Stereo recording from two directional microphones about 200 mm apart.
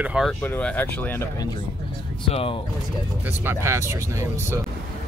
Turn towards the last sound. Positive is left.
turn(degrees=-15)  # may be behind; listen again after turning